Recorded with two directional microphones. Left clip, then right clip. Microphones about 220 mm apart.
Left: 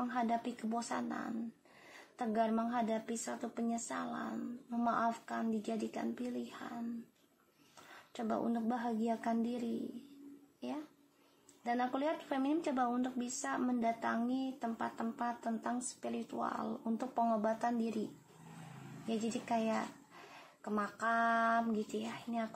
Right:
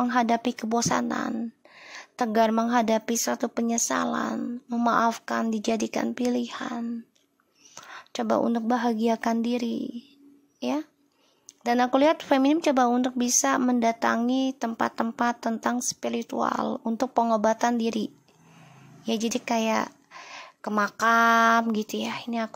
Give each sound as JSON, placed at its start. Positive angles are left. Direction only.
{"t": 0.0, "sound": "speech", "side_deg": -45}
{"t": 7.9, "sound": "speech", "side_deg": -45}
{"t": 11.6, "sound": "speech", "side_deg": -45}
{"t": 19.0, "sound": "speech", "side_deg": -40}